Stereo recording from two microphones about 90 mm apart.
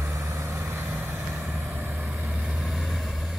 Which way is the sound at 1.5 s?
Centre (ahead or behind).